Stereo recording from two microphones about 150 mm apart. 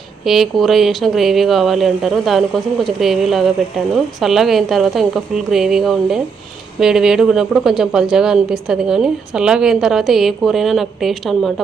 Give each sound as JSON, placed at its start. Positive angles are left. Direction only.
{"t": 0.3, "sound": "speech", "side_deg": 0}